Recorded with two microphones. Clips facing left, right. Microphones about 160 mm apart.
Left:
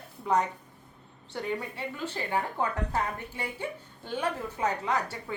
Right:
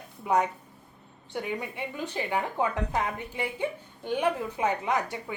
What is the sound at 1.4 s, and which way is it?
A woman's voice, 15° right (ahead or behind).